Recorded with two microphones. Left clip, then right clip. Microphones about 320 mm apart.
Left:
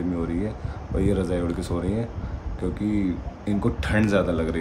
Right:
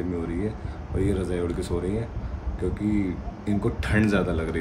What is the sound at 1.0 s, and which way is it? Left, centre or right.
Speech, centre.